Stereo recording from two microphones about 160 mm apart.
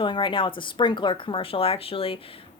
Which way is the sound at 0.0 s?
30° left (ahead or behind).